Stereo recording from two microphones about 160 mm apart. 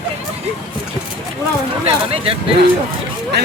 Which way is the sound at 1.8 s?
40° right (ahead or behind).